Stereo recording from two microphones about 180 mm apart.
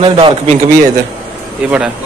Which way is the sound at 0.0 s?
30° right (ahead or behind).